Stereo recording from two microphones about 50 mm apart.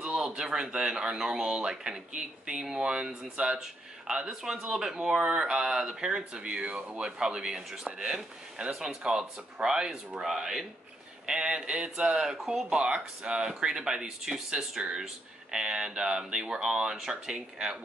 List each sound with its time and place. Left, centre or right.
0.0 s a sound: centre
0.4 s speech: centre
4.3 s speech: centre